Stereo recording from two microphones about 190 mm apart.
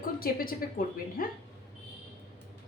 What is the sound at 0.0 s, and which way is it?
A woman's voice, 50° left (ahead or behind).